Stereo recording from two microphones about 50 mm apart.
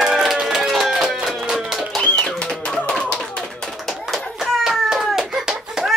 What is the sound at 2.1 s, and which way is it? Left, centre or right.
Music, left.